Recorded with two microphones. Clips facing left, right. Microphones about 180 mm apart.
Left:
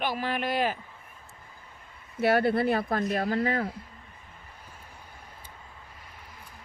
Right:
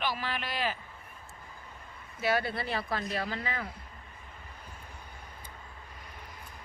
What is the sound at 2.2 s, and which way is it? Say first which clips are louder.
Speech: left 7 dB; 55° left (ahead or behind).